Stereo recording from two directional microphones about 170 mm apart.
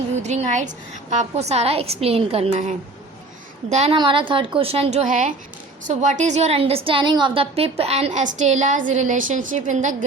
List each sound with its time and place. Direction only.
0.2 s a woman's voice: 45° right (ahead or behind)
3.9 s a woman's voice: 30° right (ahead or behind); by 9.9 s 50° right (ahead or behind)